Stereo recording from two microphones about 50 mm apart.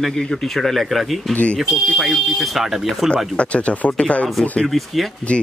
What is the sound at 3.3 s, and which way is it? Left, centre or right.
Speech, left.